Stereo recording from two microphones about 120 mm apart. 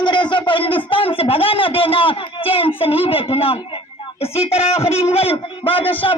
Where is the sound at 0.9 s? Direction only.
50° left (ahead or behind).